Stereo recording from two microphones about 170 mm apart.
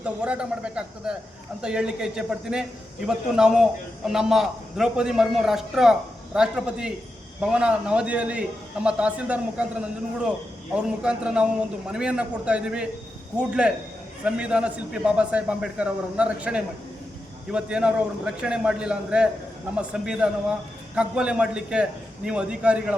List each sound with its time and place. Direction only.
0.0 s a man's voice: 5° right (ahead or behind)